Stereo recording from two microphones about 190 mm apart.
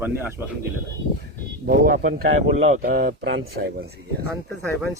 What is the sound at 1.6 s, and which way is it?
Speech, 50° right (ahead or behind).